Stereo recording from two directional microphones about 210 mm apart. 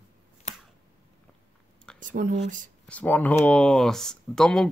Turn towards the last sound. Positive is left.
turn(degrees=5)  # may be behind; listen again after turning